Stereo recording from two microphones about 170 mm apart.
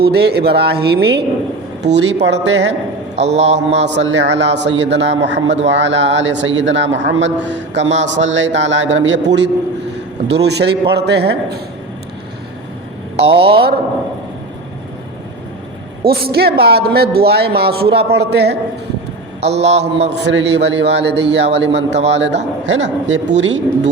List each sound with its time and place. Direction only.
0.0 s speech: 70° right (ahead or behind)
1.8 s a man's voice: 85° right
3.2 s a man's voice: 40° right (ahead or behind)
3.8 s a man's voice: 90° right
13.1 s a man's voice: 35° right (ahead or behind)
16.3 s speech: 65° right (ahead or behind)
19.4 s a man's voice: 40° right (ahead or behind)
20.1 s a man's voice: 90° right